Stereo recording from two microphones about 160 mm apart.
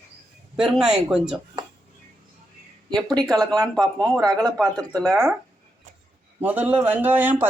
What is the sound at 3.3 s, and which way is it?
Speech, 25° right (ahead or behind).